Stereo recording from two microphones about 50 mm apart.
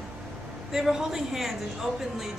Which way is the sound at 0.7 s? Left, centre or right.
Centre.